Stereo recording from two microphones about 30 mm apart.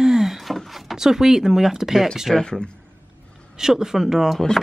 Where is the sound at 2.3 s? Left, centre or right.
Centre.